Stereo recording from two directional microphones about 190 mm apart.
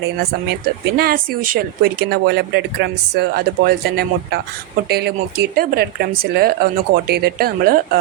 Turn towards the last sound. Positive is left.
turn(degrees=-50)  # may be behind; listen again after turning